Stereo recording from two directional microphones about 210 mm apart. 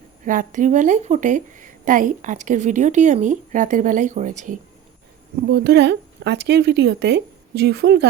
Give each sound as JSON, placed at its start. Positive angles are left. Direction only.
{"t": 0.3, "sound": "a woman's voice", "side_deg": -40}
{"t": 5.4, "sound": "speech", "side_deg": -50}